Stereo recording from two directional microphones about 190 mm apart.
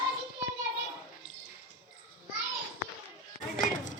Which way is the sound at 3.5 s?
45° left (ahead or behind).